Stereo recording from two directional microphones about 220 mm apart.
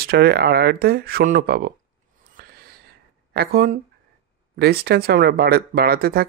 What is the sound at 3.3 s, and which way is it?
Speech, 40° right (ahead or behind).